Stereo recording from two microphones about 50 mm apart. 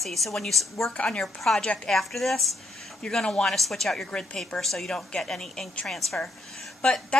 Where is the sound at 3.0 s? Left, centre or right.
Centre.